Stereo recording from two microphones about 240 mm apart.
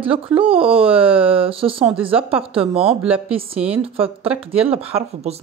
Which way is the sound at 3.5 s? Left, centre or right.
Centre.